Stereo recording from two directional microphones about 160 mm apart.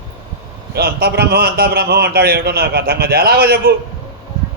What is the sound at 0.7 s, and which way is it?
A man's voice, 80° right.